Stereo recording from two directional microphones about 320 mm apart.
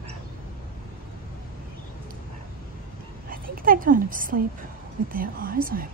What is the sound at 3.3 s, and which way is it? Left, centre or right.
A woman's voice, right.